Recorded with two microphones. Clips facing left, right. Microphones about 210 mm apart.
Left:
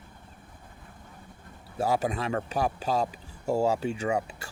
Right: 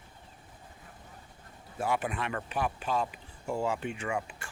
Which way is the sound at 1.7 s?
40° left (ahead or behind).